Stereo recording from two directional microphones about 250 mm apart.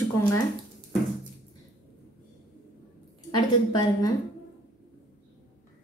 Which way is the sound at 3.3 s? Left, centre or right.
Centre.